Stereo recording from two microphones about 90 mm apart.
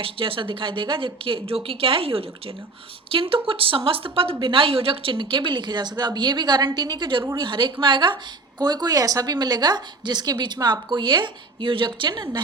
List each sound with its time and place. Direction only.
0.0 s a woman's voice: 75° right (ahead or behind)
4.4 s a woman's voice: 75° right (ahead or behind)
8.5 s a woman's voice: 50° right (ahead or behind)